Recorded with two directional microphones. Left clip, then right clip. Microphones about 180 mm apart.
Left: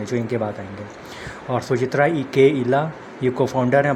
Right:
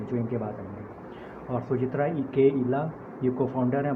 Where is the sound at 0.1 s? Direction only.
35° left (ahead or behind).